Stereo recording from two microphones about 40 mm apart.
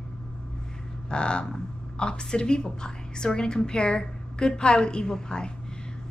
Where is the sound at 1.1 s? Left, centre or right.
Left.